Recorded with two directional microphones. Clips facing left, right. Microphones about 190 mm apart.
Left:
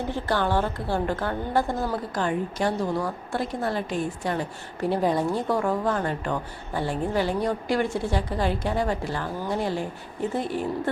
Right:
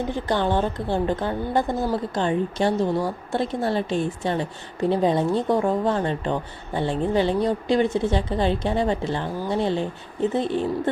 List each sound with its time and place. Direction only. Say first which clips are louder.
0.1 s a woman's voice: even; 20° right (ahead or behind)